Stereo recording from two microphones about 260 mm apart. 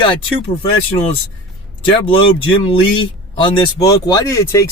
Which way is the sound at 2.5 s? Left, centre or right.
Centre.